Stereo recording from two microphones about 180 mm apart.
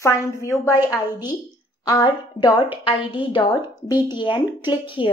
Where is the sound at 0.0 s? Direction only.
15° left (ahead or behind).